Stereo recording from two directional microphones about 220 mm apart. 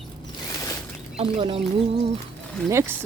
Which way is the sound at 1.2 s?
25° right (ahead or behind).